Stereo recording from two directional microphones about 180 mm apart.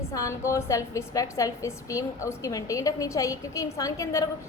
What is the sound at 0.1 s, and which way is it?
A woman's voice, 15° left (ahead or behind).